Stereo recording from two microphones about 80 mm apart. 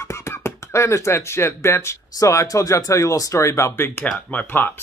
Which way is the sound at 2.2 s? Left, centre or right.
Left.